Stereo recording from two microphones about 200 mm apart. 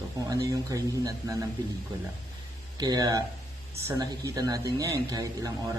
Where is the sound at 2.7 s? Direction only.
20° right (ahead or behind).